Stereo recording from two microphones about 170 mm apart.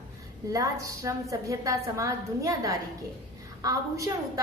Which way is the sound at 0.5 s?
20° right (ahead or behind).